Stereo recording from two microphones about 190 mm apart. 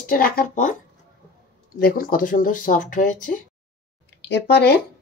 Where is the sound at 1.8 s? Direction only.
50° left (ahead or behind).